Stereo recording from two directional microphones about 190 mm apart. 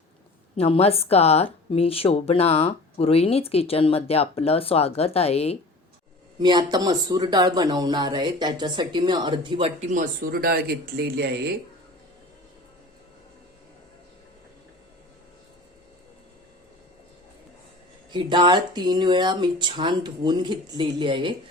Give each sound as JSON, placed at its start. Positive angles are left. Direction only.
{"t": 0.5, "sound": "speech", "side_deg": 30}
{"t": 6.4, "sound": "speech", "side_deg": -20}
{"t": 10.0, "sound": "speech", "side_deg": -50}
{"t": 18.1, "sound": "speech", "side_deg": -25}